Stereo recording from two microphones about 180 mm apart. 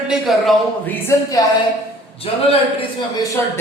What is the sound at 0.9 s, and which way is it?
Speech, 15° left (ahead or behind).